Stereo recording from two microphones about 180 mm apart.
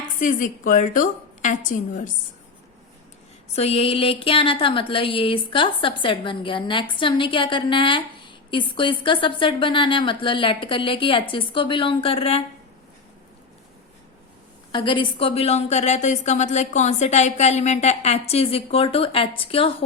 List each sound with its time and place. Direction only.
0.2 s a woman's voice: 45° left (ahead or behind)
3.5 s a woman's voice: 35° left (ahead or behind)
14.7 s a woman's voice: 25° left (ahead or behind)